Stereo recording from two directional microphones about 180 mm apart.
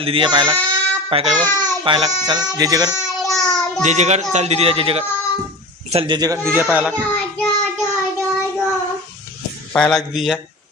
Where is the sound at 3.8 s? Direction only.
40° right (ahead or behind); by 6.9 s 10° right (ahead or behind).